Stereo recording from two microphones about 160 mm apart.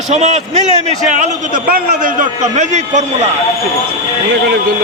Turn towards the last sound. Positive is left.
turn(degrees=-45)  # may be behind; listen again after turning